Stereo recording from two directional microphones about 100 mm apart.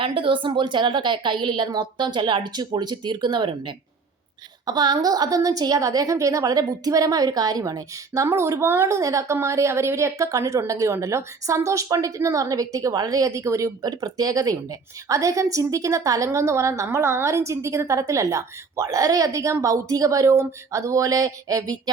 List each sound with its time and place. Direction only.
0.0 s a woman's voice: 55° right (ahead or behind); by 21.8 s 35° right (ahead or behind)